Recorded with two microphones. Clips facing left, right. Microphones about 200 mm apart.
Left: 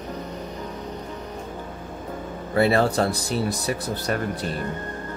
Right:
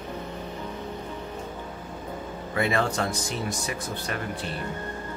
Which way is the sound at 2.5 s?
35° left (ahead or behind).